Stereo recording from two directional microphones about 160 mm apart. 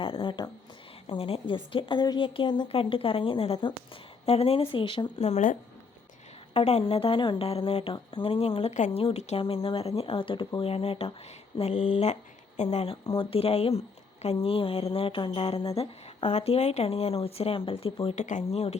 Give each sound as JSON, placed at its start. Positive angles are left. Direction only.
{"t": 0.0, "sound": "a woman's voice", "side_deg": 30}